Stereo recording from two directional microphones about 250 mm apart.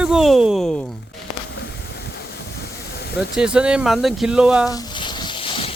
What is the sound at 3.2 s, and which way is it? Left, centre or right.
Speech, centre.